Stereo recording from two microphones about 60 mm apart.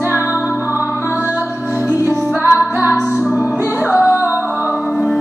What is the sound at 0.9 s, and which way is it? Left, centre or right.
Music, left.